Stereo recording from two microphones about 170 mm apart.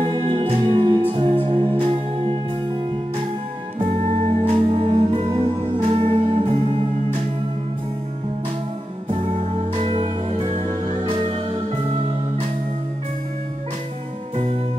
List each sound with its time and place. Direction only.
0.0 s music: 30° right (ahead or behind)
3.8 s music: 40° right (ahead or behind)
9.8 s music: 35° right (ahead or behind)